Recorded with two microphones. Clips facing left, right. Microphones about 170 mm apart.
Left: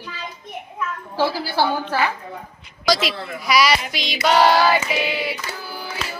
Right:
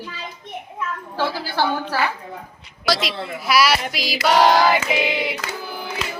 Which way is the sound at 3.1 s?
25° right (ahead or behind).